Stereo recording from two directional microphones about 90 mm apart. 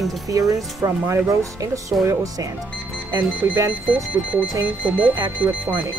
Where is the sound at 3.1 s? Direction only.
30° right (ahead or behind).